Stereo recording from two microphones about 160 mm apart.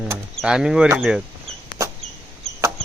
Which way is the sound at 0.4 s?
5° right (ahead or behind).